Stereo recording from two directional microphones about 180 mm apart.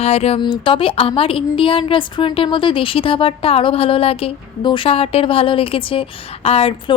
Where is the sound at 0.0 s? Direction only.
35° left (ahead or behind).